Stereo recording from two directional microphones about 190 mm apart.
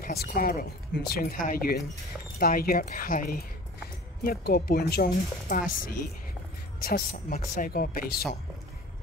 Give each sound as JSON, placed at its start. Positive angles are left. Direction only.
{"t": 0.0, "sound": "speech", "side_deg": 55}